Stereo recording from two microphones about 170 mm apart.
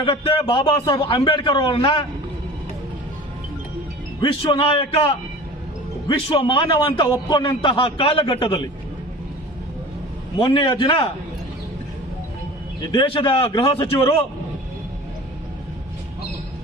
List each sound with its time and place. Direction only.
0.0 s a man's voice: 30° left (ahead or behind)
4.2 s a man's voice: 30° left (ahead or behind)
10.4 s a man's voice: 30° left (ahead or behind)
12.9 s a man's voice: 30° left (ahead or behind)